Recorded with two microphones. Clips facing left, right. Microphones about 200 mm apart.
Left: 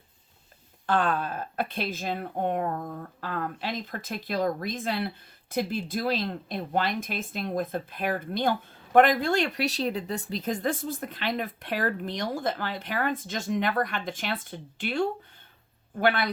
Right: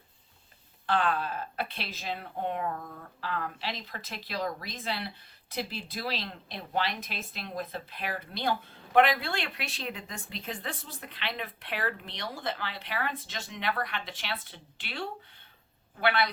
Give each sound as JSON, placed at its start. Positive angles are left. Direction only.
{"t": 0.9, "sound": "speech", "side_deg": 45}